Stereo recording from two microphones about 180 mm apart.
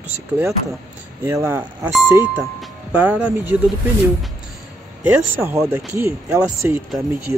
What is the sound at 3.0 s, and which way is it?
Speech, 10° right (ahead or behind).